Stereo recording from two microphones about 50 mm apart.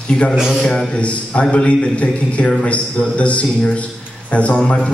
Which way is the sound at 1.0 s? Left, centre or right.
Left.